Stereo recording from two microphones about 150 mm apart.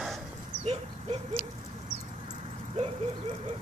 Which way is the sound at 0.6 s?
45° right (ahead or behind).